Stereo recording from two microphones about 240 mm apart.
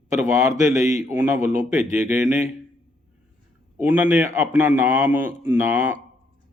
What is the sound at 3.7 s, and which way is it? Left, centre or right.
Speech, centre.